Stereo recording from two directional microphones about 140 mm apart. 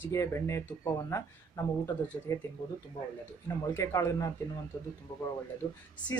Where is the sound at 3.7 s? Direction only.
20° left (ahead or behind).